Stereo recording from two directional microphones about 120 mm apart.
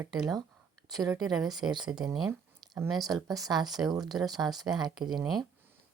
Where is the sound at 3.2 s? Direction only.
30° right (ahead or behind).